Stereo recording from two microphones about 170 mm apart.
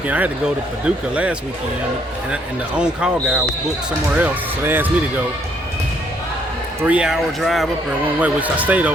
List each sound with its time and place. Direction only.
0.1 s speech: 5° right (ahead or behind)
6.8 s speech: 5° right (ahead or behind)